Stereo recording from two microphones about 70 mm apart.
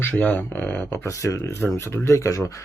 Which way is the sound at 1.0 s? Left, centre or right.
Left.